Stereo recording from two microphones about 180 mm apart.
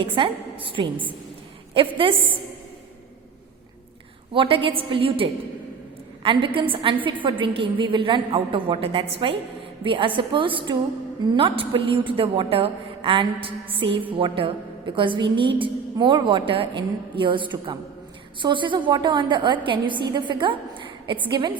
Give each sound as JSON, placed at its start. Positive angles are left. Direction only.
{"t": 0.0, "sound": "a woman's voice", "side_deg": -30}
{"t": 2.0, "sound": "a woman's voice", "side_deg": -30}
{"t": 4.4, "sound": "a woman's voice", "side_deg": -30}